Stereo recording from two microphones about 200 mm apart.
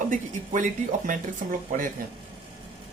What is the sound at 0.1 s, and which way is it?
Speech, 40° right (ahead or behind).